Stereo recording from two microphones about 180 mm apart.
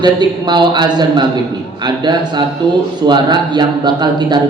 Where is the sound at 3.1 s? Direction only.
25° right (ahead or behind).